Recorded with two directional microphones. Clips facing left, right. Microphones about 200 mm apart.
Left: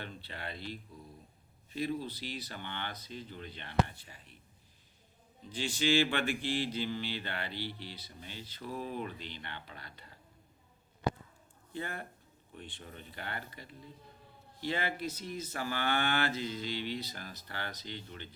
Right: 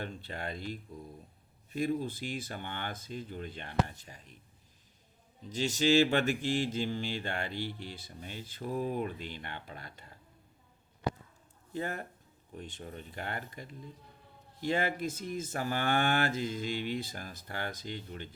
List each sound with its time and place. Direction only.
0.0 s speech: 45° right (ahead or behind)
5.5 s speech: 40° right (ahead or behind)
11.7 s speech: 40° right (ahead or behind)